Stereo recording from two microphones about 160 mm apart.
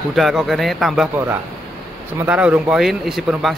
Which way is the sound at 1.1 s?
15° right (ahead or behind).